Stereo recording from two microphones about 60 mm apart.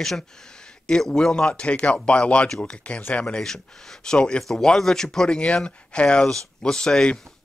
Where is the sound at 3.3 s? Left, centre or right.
Centre.